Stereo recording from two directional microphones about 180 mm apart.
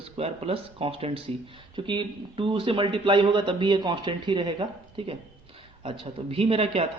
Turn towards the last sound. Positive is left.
turn(degrees=-35)  # may be behind; listen again after turning